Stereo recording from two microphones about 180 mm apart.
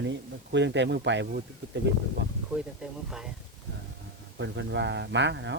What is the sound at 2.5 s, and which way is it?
Speech, 5° right (ahead or behind).